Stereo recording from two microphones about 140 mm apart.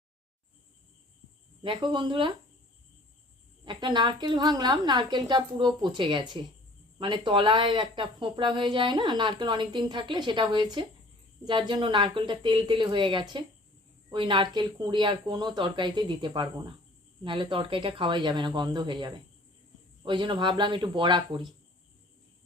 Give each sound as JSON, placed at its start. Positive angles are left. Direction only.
{"t": 1.6, "sound": "a woman's voice", "side_deg": -35}
{"t": 3.7, "sound": "a woman's voice", "side_deg": -30}